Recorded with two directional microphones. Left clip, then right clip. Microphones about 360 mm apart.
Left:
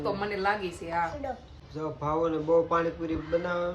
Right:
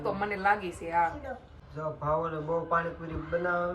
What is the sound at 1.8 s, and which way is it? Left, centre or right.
Speech, centre.